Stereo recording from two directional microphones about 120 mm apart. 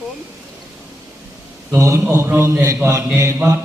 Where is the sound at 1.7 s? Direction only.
25° right (ahead or behind).